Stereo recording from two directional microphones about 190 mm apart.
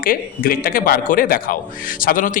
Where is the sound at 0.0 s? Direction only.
45° left (ahead or behind).